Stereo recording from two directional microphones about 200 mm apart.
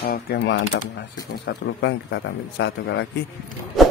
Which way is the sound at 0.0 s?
50° left (ahead or behind).